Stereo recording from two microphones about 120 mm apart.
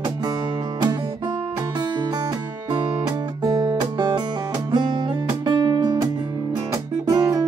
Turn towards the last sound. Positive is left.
turn(degrees=-30)  # may be behind; listen again after turning